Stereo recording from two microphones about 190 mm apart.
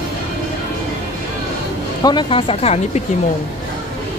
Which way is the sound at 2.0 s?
25° left (ahead or behind).